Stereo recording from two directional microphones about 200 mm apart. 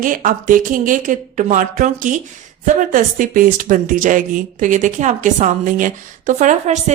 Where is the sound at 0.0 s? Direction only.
40° right (ahead or behind).